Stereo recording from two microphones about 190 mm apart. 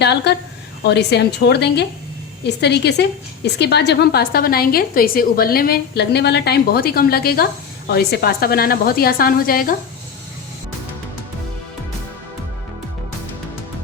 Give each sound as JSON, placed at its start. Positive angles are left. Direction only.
{"t": 0.0, "sound": "a woman's voice", "side_deg": 60}